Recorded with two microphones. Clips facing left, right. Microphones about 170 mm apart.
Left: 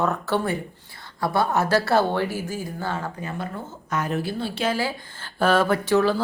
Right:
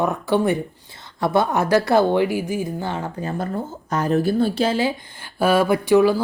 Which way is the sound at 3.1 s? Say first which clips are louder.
Right 6 dB; 35° right (ahead or behind).